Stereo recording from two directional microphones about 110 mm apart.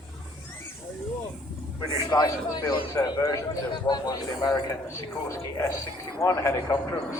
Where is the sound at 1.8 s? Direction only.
35° left (ahead or behind).